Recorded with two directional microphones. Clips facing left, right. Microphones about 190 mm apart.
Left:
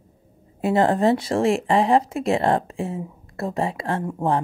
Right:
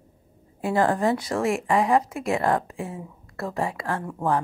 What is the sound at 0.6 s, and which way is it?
Speech, 25° left (ahead or behind).